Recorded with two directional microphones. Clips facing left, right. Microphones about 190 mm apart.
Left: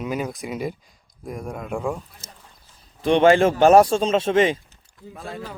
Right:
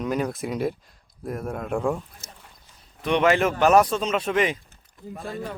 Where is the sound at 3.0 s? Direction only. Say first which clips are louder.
Left 5 dB; 30° left (ahead or behind).